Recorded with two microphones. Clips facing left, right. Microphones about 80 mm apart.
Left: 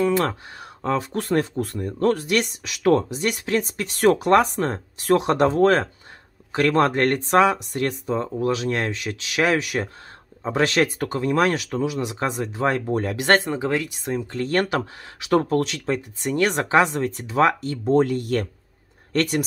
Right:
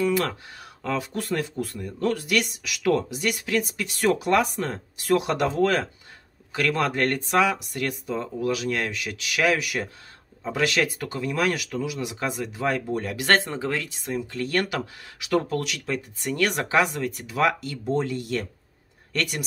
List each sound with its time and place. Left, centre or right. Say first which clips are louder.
0.0 s speech: left 3 dB; left
13.5 s speech: left 5 dB; left
14.0 s speech: left 3 dB; left
17.9 s speech: left 7 dB; left